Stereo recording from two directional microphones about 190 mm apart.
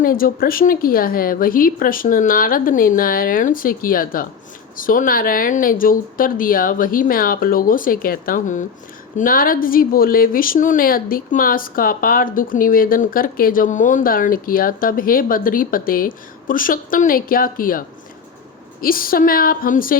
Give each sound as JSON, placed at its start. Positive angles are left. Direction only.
{"t": 0.0, "sound": "a woman's voice", "side_deg": 50}